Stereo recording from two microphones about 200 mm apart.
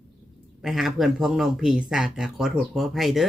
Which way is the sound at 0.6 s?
Centre (ahead or behind).